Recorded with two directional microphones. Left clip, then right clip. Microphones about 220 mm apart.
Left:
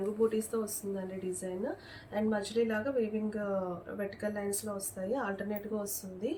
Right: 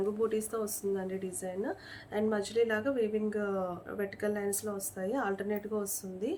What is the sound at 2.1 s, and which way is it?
Speech, 50° right (ahead or behind).